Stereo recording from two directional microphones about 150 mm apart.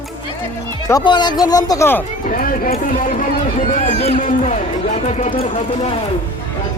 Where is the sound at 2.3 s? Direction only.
70° left (ahead or behind); by 6.0 s 40° left (ahead or behind).